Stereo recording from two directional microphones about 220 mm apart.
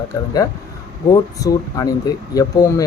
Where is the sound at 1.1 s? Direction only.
15° left (ahead or behind).